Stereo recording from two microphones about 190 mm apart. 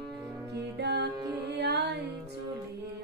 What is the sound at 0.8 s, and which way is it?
Music, 60° right (ahead or behind).